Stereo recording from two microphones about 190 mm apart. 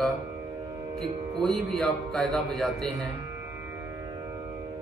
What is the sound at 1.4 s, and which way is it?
A man's voice, centre (ahead or behind).